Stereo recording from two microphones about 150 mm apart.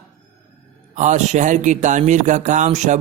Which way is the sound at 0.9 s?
55° right (ahead or behind).